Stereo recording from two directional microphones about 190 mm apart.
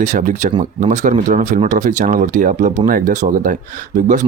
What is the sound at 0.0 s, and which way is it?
Speech, 40° right (ahead or behind).